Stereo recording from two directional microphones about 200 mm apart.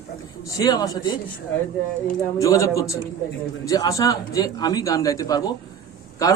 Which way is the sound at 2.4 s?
15° left (ahead or behind).